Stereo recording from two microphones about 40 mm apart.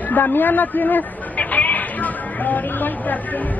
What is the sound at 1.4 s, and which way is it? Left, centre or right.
Speech, left.